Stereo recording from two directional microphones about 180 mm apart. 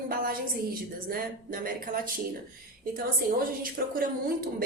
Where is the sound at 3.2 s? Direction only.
55° right (ahead or behind).